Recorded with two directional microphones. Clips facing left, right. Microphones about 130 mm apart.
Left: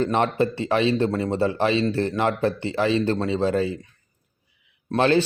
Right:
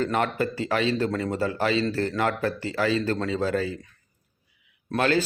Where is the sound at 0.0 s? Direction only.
25° left (ahead or behind).